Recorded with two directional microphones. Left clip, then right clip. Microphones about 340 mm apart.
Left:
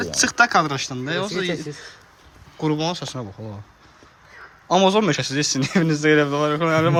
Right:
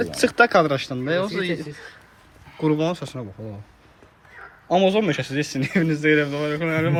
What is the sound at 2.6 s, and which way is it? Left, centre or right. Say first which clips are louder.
Speech: right 1 dB; centre.